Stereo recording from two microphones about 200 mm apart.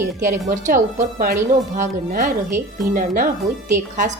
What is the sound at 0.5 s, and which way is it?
A woman's voice, 40° right (ahead or behind).